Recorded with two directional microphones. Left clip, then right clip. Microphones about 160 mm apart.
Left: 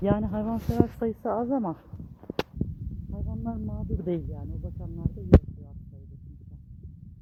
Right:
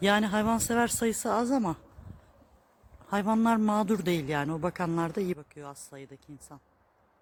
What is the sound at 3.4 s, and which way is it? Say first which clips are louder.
Speech: right 12 dB; 50° right (ahead or behind).